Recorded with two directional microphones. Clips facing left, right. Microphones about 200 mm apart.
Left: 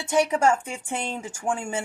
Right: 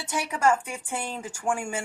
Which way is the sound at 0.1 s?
25° left (ahead or behind).